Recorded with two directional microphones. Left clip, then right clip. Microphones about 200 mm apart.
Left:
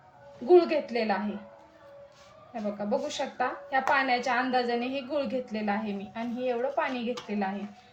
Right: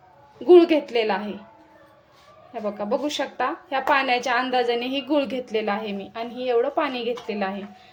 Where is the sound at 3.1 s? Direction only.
55° right (ahead or behind).